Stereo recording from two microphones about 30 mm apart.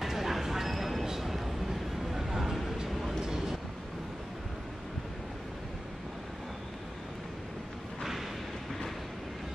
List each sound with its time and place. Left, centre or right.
0.0 s a sound: centre
2.9 s vehicle: centre
3.2 s vehicle: centre